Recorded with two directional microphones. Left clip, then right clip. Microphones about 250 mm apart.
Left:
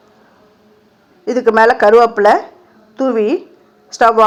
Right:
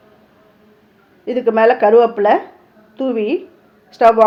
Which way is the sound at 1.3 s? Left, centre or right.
Centre.